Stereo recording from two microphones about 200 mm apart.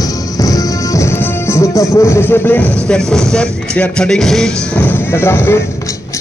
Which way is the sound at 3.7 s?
5° left (ahead or behind).